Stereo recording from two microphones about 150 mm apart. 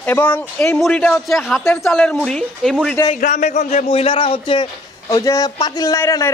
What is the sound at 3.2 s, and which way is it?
A man's voice, 50° left (ahead or behind).